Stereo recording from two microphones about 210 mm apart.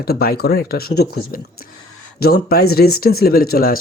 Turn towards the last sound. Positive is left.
turn(degrees=45)  # may be behind; listen again after turning